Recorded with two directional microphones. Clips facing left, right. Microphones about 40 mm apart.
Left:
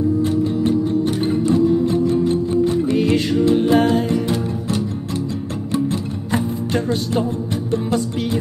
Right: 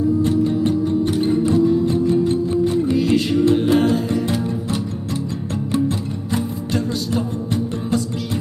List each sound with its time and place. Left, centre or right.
0.2 s music: centre
2.9 s music: left
6.3 s music: left